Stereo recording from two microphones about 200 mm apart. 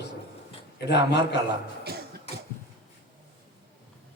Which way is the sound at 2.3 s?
30° left (ahead or behind).